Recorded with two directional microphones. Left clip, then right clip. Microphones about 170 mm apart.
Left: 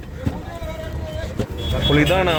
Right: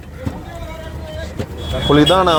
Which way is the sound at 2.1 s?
10° left (ahead or behind).